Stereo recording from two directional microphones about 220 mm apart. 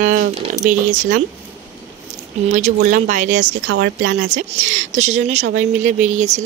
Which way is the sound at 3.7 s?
60° right (ahead or behind).